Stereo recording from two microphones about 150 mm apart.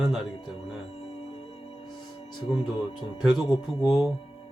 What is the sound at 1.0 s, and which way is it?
Music, 40° left (ahead or behind).